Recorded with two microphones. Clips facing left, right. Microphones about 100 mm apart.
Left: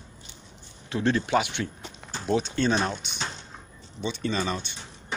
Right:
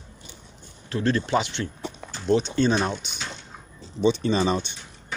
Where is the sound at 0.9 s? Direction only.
15° left (ahead or behind); by 3.1 s centre (ahead or behind).